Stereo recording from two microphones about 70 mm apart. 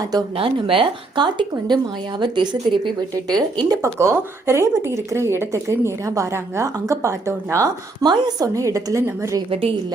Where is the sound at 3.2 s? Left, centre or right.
Right.